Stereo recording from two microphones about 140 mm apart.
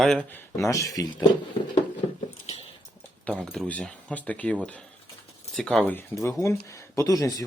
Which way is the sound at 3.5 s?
5° left (ahead or behind).